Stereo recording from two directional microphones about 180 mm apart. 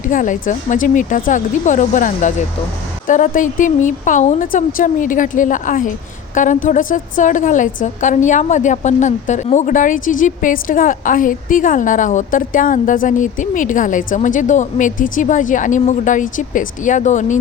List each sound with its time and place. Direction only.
0.0 s a woman's voice: 45° left (ahead or behind)